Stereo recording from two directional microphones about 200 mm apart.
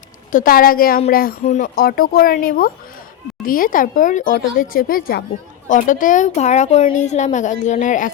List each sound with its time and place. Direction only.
0.3 s a woman's voice: 45° left (ahead or behind)